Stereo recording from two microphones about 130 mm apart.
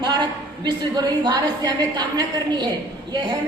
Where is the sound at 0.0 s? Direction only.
35° right (ahead or behind).